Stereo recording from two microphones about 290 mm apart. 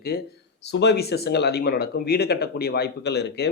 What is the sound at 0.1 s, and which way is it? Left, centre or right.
A man's voice, left.